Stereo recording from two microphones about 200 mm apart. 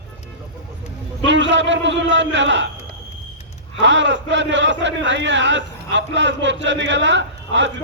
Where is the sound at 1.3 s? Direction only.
65° right (ahead or behind).